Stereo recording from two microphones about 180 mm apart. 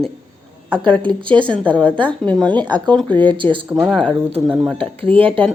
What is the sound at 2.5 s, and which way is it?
Speech, 25° right (ahead or behind).